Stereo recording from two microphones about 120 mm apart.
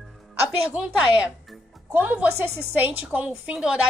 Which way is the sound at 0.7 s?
5° right (ahead or behind).